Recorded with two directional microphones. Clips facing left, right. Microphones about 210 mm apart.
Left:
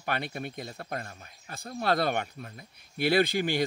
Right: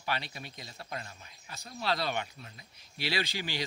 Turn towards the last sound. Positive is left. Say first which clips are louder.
# left 10 dB
turn(degrees=55)  # may be behind; listen again after turning